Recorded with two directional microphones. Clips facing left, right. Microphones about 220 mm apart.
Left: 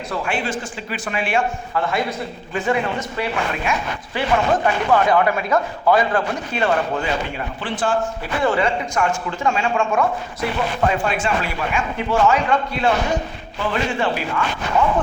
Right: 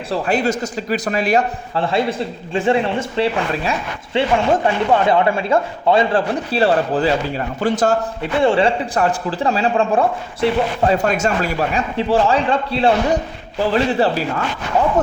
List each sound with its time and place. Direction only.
0.1 s a man's voice: 40° right (ahead or behind)
8.2 s a man's voice: 30° right (ahead or behind)